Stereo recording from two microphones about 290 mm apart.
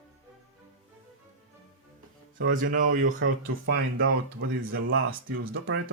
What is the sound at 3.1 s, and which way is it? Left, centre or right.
Speech, right.